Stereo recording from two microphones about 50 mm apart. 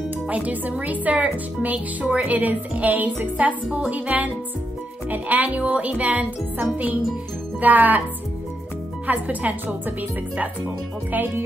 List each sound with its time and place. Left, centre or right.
0.3 s speech: right
7.6 s speech: right
9.0 s speech: right